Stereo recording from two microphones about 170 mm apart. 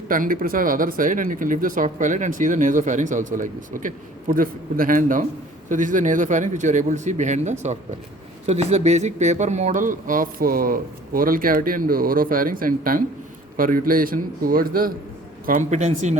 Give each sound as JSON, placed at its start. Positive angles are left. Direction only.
{"t": 0.1, "sound": "speech", "side_deg": -55}
{"t": 15.4, "sound": "speech", "side_deg": -45}